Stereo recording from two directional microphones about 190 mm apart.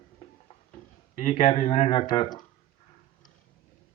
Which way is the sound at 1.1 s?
40° left (ahead or behind).